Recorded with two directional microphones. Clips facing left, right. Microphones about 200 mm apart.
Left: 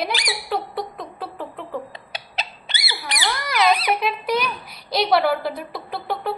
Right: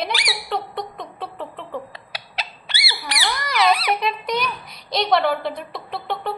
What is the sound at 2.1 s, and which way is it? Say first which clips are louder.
Rodents: left 1 dB; 20° left (ahead or behind).